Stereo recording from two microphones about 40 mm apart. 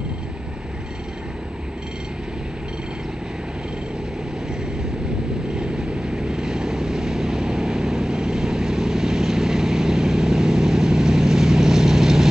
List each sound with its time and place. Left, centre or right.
5.6 s vehicle: centre